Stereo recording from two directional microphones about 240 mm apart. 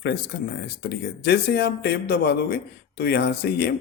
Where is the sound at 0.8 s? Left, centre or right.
Left.